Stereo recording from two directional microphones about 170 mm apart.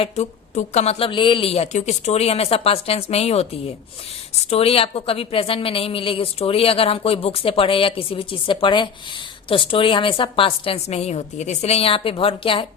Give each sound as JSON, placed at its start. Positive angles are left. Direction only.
{"t": 0.0, "sound": "speech", "side_deg": 40}